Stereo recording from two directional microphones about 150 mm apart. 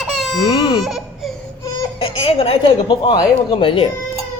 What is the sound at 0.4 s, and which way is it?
Speech, 40° left (ahead or behind).